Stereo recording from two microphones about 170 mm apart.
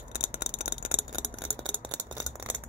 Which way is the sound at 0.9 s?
30° left (ahead or behind).